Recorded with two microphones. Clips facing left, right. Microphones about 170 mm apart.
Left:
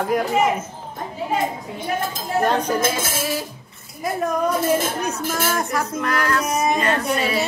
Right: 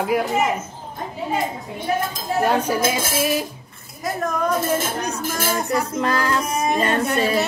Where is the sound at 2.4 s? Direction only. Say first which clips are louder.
Right 1 dB; 10° right (ahead or behind).